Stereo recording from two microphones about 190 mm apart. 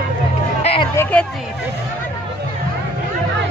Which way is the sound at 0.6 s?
30° left (ahead or behind).